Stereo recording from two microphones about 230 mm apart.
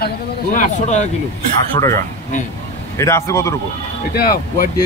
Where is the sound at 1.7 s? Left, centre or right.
Centre.